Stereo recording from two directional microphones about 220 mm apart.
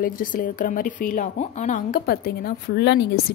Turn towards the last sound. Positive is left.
turn(degrees=50)  # may be behind; listen again after turning